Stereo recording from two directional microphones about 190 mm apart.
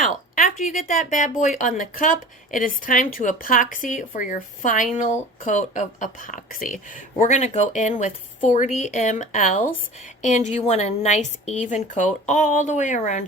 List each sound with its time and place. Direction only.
0.0 s a woman's voice: 45° left (ahead or behind)